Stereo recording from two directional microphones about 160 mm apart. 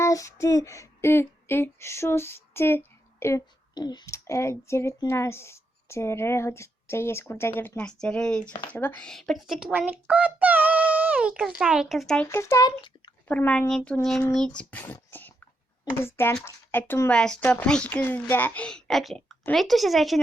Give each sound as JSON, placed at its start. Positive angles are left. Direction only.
{"t": 0.0, "sound": "a sound", "side_deg": 20}
{"t": 8.7, "sound": "speech", "side_deg": 10}
{"t": 12.3, "sound": "a child's voice", "side_deg": 15}
{"t": 13.2, "sound": "speech", "side_deg": 10}
{"t": 15.1, "sound": "a sound", "side_deg": 10}
{"t": 15.8, "sound": "speech", "side_deg": 15}